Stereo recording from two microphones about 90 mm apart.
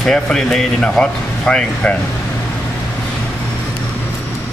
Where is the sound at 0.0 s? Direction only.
5° left (ahead or behind).